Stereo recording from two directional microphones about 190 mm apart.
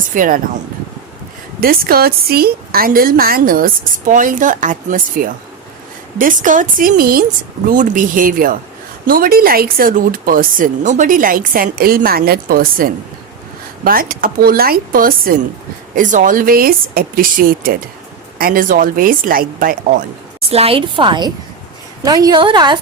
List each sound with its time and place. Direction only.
0.1 s speech: 45° right (ahead or behind)
1.6 s speech: 50° right (ahead or behind)
20.5 s a woman's voice: 30° right (ahead or behind)